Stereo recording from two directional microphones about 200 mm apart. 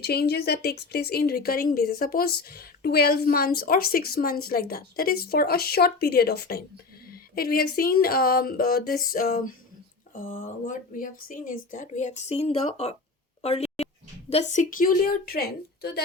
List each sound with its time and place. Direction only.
0.0 s speech: 55° left (ahead or behind); by 13.0 s 30° left (ahead or behind)
13.4 s a sound: 30° left (ahead or behind)
14.3 s speech: 35° left (ahead or behind); by 15.9 s 50° left (ahead or behind)